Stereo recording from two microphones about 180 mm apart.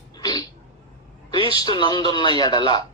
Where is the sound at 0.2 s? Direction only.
20° left (ahead or behind).